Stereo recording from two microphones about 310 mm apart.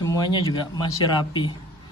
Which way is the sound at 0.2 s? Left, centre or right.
Centre.